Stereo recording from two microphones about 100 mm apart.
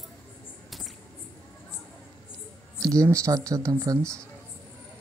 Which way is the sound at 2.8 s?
35° right (ahead or behind).